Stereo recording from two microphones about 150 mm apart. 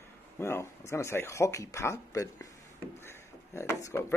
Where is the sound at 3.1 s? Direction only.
15° left (ahead or behind).